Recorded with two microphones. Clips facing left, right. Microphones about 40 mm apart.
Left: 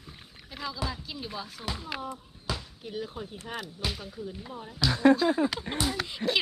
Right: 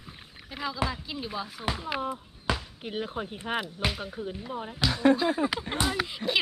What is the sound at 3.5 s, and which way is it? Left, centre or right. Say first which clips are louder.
Speech: right 5 dB; right.